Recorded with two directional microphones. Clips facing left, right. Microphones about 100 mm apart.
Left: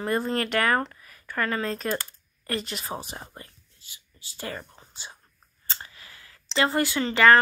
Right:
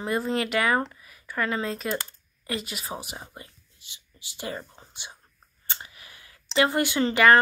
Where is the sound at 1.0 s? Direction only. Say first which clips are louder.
Even; 15° right (ahead or behind).